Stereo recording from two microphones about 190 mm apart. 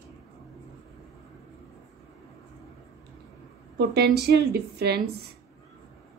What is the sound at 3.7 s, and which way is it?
A woman's voice, 55° right (ahead or behind).